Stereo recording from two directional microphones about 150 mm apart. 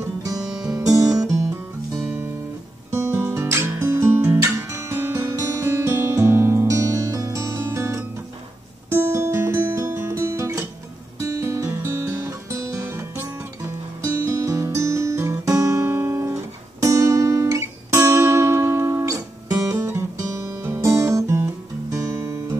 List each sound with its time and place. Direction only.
0.2 s music: 25° right (ahead or behind)
2.9 s guitar: 15° right (ahead or behind)
8.9 s music: 20° right (ahead or behind)
11.1 s guitar: 20° right (ahead or behind)
16.8 s music: 20° right (ahead or behind)
21.9 s guitar: 20° right (ahead or behind)